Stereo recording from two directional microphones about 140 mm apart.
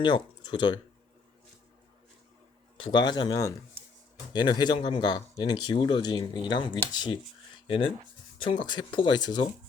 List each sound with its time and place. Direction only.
0.0 s speech: 35° left (ahead or behind)
2.8 s speech: 35° left (ahead or behind)